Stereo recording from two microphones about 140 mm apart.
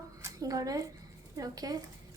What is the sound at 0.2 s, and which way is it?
A woman's voice, 25° right (ahead or behind).